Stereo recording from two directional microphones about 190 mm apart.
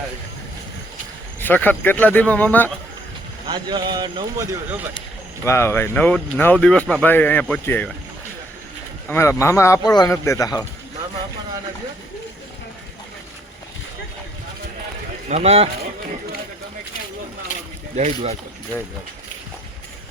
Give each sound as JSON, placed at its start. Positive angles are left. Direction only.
{"t": 1.4, "sound": "speech", "side_deg": 10}
{"t": 3.5, "sound": "speech", "side_deg": -25}
{"t": 5.5, "sound": "speech", "side_deg": 15}
{"t": 9.0, "sound": "speech", "side_deg": 15}
{"t": 15.3, "sound": "speech", "side_deg": -35}
{"t": 17.9, "sound": "speech", "side_deg": -35}